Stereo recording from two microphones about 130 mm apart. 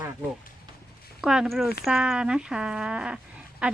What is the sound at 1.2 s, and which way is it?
Speech, 5° right (ahead or behind).